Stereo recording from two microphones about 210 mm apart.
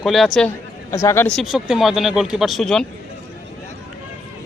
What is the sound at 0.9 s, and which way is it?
A man's voice, 15° left (ahead or behind).